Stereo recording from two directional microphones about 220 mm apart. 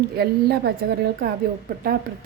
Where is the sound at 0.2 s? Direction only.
45° right (ahead or behind).